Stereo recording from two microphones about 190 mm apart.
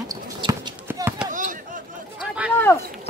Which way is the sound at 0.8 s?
10° right (ahead or behind).